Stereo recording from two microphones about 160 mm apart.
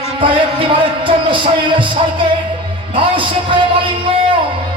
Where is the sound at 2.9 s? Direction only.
30° right (ahead or behind).